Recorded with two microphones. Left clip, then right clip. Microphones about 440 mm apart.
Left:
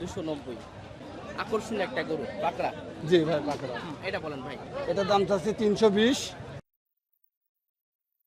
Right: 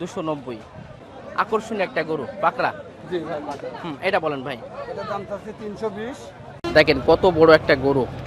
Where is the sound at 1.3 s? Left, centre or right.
Centre.